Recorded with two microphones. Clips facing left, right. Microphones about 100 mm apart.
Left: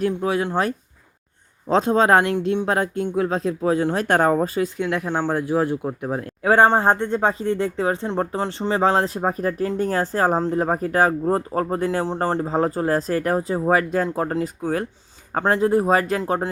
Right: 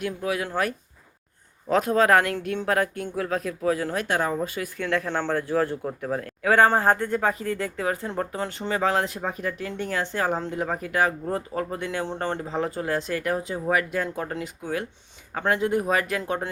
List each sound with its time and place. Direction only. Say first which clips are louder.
0.0 s speech: left 6 dB; 30° left (ahead or behind)
4.0 s speech: left 9 dB; 50° left (ahead or behind)
4.6 s speech: left 4 dB; 15° left (ahead or behind); by 16.5 s 35° left (ahead or behind)